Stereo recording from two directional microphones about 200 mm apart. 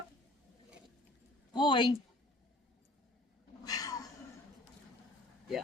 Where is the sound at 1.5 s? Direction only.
25° left (ahead or behind).